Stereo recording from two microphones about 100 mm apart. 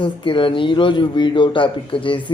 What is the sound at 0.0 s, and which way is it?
A man's voice, 55° left (ahead or behind).